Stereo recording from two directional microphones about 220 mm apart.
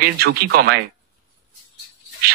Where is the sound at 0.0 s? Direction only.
45° right (ahead or behind).